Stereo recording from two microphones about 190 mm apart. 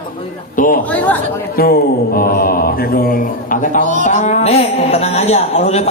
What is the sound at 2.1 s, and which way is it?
Mantra, 50° left (ahead or behind).